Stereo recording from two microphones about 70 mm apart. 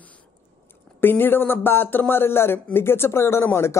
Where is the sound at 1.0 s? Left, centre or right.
Left.